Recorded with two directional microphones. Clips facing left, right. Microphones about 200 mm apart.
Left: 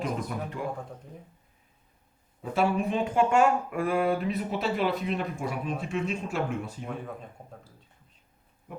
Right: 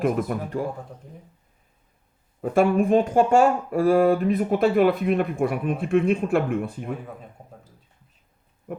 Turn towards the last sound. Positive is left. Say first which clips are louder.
# right 4 dB
turn(degrees=-5)  # may be behind; listen again after turning